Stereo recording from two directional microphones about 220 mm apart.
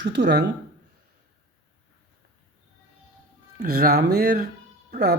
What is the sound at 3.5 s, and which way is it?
A woman's voice, 45° right (ahead or behind).